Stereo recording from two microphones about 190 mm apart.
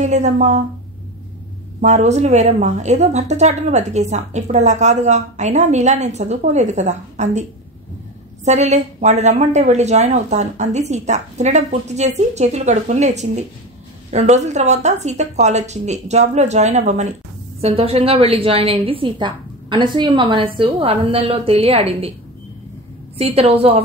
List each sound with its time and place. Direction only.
0.0 s speech: 35° right (ahead or behind)
1.8 s speech: 35° right (ahead or behind)
8.5 s a woman's voice: 35° right (ahead or behind)
23.1 s speech: 30° right (ahead or behind)